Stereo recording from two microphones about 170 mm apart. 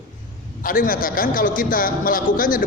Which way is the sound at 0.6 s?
55° left (ahead or behind).